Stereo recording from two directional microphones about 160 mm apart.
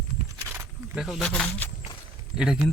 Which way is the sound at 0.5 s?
15° right (ahead or behind).